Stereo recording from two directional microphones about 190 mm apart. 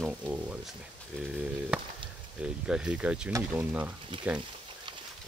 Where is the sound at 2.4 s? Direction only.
5° right (ahead or behind).